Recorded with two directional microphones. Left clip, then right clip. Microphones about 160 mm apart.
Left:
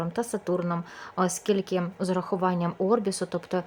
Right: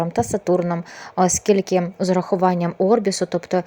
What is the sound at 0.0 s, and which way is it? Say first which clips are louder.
Speech: right 9 dB; 25° right (ahead or behind).